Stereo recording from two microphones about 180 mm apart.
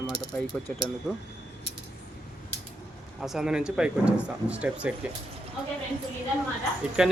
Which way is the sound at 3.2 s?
5° right (ahead or behind).